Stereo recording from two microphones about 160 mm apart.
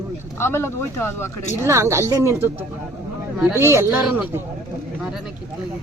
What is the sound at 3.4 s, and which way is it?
Speech, 15° right (ahead or behind).